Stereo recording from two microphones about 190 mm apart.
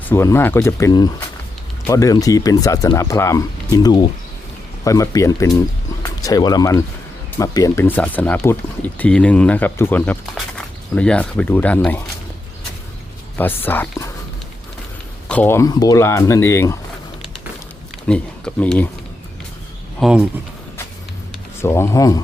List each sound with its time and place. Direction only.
0.1 s speech: 15° left (ahead or behind)
13.7 s speech: 10° left (ahead or behind)
15.3 s speech: 10° left (ahead or behind)
18.1 s speech: 5° left (ahead or behind)
20.0 s speech: 5° right (ahead or behind)
21.6 s speech: 15° left (ahead or behind)